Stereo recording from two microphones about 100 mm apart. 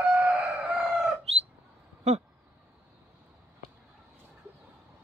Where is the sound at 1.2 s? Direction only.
90° right.